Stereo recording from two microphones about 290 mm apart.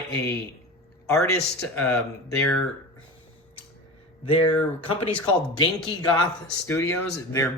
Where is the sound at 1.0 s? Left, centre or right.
Centre.